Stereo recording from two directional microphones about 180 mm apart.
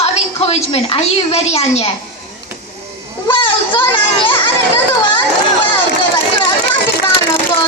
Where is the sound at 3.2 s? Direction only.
25° left (ahead or behind).